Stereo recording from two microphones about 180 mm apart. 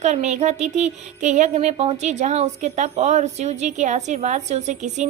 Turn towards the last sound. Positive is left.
turn(degrees=-40)  # may be behind; listen again after turning